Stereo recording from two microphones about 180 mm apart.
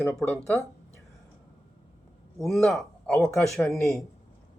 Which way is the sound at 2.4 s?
Centre (ahead or behind).